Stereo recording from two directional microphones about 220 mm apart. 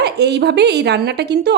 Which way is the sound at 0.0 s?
50° right (ahead or behind).